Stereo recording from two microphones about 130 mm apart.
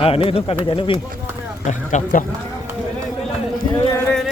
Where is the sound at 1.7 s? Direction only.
65° left (ahead or behind).